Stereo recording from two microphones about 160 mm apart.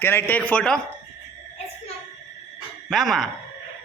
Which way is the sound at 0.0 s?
15° left (ahead or behind).